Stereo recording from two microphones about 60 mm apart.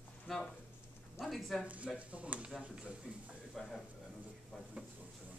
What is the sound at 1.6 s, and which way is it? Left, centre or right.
Speech, right.